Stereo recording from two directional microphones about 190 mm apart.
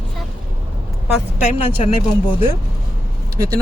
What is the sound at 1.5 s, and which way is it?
Speech, 30° left (ahead or behind).